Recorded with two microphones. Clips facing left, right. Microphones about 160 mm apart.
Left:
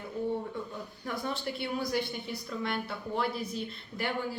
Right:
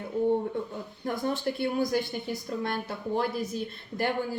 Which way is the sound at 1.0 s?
45° right (ahead or behind).